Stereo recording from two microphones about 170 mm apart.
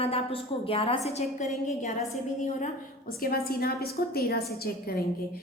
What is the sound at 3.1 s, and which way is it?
A woman's voice, 60° left (ahead or behind).